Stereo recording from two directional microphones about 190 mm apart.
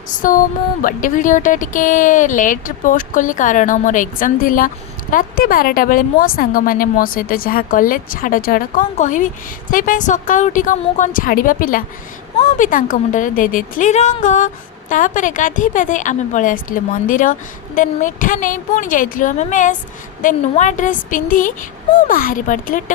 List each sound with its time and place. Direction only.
0.1 s a woman's voice: 45° left (ahead or behind)